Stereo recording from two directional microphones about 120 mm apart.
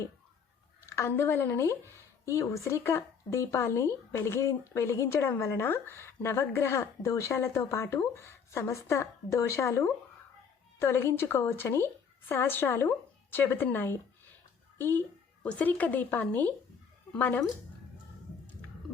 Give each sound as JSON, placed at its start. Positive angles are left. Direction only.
{"t": 0.9, "sound": "speech", "side_deg": 20}